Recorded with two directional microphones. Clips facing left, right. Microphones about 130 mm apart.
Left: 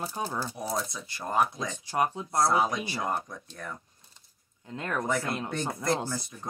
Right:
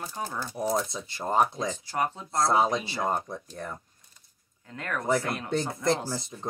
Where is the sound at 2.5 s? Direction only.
25° right (ahead or behind).